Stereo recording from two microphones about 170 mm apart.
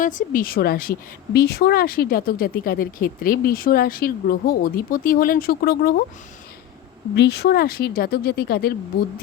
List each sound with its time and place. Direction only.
0.0 s speech: 50° left (ahead or behind)
7.2 s a woman's voice: 85° left; by 8.7 s 70° left (ahead or behind)